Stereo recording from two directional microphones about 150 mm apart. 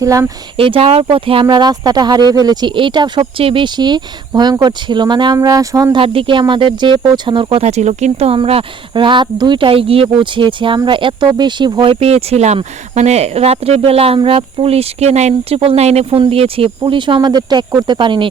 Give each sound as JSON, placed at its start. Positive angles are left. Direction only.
{"t": 0.0, "sound": "speech", "side_deg": -20}
{"t": 0.5, "sound": "speech", "side_deg": -40}